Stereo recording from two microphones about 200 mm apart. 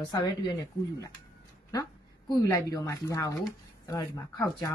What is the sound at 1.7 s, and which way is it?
A woman's voice, 20° left (ahead or behind).